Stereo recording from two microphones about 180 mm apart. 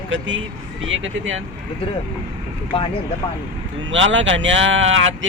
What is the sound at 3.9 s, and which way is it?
Speech, 90° right.